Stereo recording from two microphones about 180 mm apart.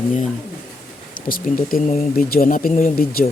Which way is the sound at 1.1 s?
50° left (ahead or behind).